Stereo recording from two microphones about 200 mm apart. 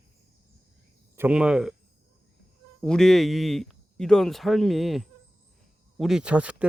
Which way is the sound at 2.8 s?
5° left (ahead or behind).